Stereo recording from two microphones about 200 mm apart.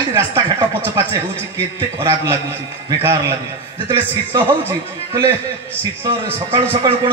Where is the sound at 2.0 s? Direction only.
15° right (ahead or behind).